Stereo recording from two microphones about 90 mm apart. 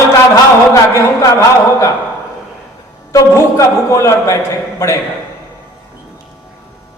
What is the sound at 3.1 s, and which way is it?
A man's voice, 35° left (ahead or behind).